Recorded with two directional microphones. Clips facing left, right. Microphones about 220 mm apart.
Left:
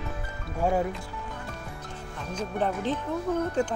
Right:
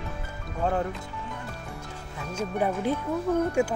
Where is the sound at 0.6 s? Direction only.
10° left (ahead or behind).